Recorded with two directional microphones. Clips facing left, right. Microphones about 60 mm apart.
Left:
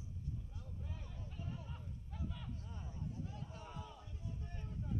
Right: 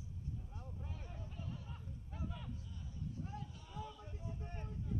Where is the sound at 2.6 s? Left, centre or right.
Left.